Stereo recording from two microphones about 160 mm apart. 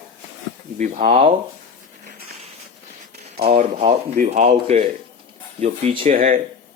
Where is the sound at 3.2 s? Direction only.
40° right (ahead or behind).